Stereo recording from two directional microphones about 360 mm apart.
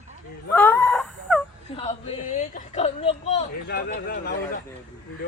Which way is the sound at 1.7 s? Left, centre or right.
Centre.